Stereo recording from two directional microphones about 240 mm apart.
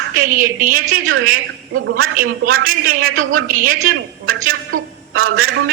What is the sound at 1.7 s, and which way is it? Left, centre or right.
Speech, right.